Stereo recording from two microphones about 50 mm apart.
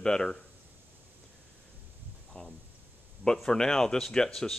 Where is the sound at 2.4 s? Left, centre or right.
Left.